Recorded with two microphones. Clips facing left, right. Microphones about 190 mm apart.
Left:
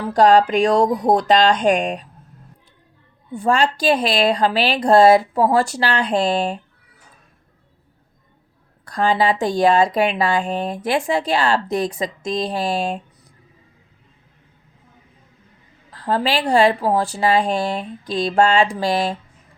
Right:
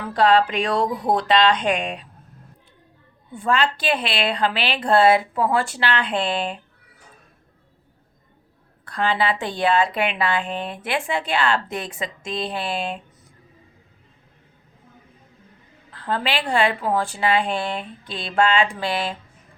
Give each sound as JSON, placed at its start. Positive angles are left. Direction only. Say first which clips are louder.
{"t": 0.1, "sound": "speech", "louder": "left 4 dB", "side_deg": 45}
{"t": 3.3, "sound": "a woman's voice", "louder": "left 4 dB", "side_deg": 40}
{"t": 8.8, "sound": "a woman's voice", "louder": "left 4 dB", "side_deg": 40}
{"t": 15.9, "sound": "a woman's voice", "louder": "left 5 dB", "side_deg": 35}